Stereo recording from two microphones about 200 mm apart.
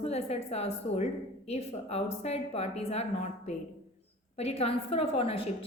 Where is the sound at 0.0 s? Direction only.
30° left (ahead or behind).